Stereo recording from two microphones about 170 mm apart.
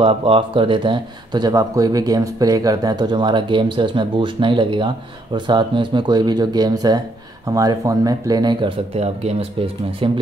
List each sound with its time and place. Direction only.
0.0 s speech: 30° right (ahead or behind)